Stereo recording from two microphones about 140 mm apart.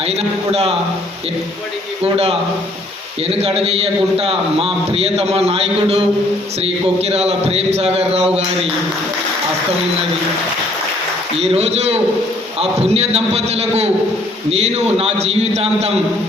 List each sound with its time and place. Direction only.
0.2 s a man's voice: 45° right (ahead or behind)
3.2 s a man's voice: 45° right (ahead or behind)
11.3 s a man's voice: 45° right (ahead or behind)